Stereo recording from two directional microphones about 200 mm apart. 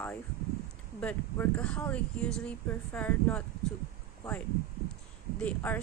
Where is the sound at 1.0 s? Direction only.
5° left (ahead or behind).